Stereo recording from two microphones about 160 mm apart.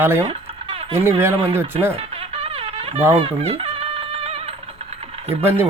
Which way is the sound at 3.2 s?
40° right (ahead or behind).